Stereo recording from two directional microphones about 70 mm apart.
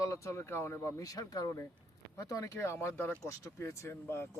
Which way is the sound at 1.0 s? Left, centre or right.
Left.